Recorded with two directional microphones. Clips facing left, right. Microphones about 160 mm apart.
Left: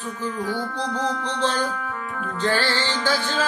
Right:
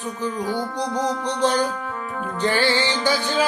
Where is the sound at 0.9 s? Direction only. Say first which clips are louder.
Right 3 dB; 15° right (ahead or behind).